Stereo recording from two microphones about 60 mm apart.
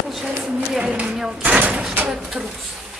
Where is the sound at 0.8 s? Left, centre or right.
Centre.